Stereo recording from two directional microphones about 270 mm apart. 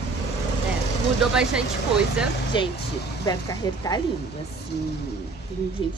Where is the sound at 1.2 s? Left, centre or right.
Centre.